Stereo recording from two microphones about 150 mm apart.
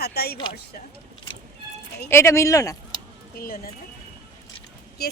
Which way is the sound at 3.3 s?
75° left (ahead or behind).